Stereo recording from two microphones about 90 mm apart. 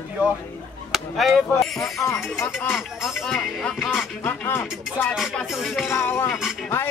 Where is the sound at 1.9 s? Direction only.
35° left (ahead or behind).